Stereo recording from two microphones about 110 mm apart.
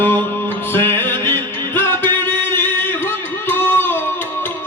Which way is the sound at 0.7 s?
20° left (ahead or behind).